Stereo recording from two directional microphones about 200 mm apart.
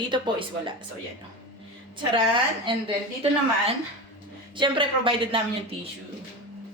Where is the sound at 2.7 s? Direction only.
25° right (ahead or behind).